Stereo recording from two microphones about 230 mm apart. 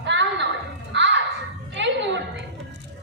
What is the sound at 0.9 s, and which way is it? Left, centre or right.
Music, right.